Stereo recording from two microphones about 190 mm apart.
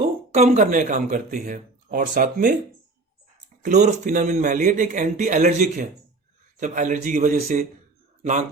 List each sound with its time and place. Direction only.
0.0 s speech: 35° right (ahead or behind)
3.6 s a man's voice: 40° right (ahead or behind)